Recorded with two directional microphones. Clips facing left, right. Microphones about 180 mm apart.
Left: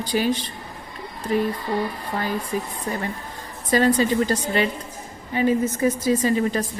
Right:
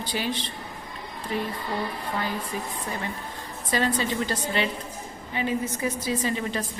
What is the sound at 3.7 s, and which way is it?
A woman's voice, 45° left (ahead or behind).